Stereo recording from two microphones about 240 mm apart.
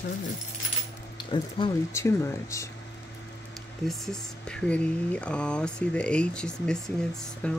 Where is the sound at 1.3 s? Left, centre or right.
Centre.